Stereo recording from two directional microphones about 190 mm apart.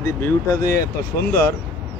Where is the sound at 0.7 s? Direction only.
55° left (ahead or behind).